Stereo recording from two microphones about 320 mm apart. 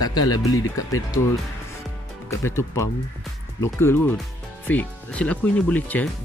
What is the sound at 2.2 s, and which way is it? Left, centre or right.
Speech, centre.